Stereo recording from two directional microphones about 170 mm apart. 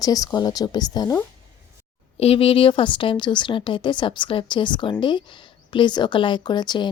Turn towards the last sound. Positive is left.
turn(degrees=25)  # may be behind; listen again after turning